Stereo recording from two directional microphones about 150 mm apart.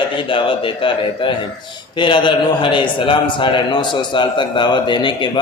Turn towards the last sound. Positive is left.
turn(degrees=30)  # may be behind; listen again after turning